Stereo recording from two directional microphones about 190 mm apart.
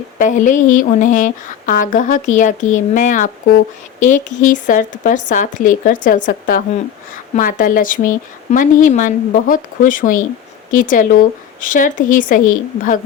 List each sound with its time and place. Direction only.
0.2 s speech: 40° left (ahead or behind)